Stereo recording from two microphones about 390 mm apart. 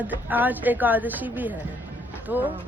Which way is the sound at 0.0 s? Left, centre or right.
Centre.